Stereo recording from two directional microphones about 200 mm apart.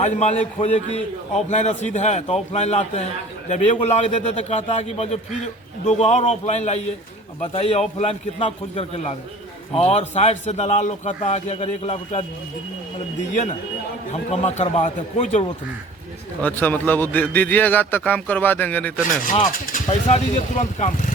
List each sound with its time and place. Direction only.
0.0 s a man's voice: 35° left (ahead or behind)
14.1 s a man's voice: 35° left (ahead or behind)
16.4 s a man's voice: 10° left (ahead or behind)
19.3 s a man's voice: 35° left (ahead or behind)